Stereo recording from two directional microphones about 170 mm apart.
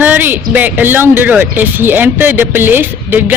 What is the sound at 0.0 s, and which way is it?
Speech, 10° right (ahead or behind).